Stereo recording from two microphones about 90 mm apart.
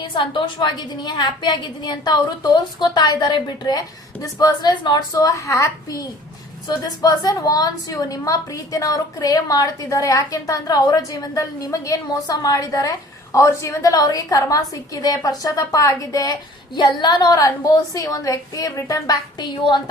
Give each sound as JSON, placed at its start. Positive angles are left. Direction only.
{"t": 0.0, "sound": "a woman's voice", "side_deg": 65}
{"t": 16.7, "sound": "a woman's voice", "side_deg": 55}